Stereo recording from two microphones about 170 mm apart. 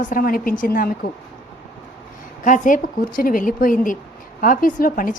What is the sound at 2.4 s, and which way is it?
A woman's voice, 50° left (ahead or behind).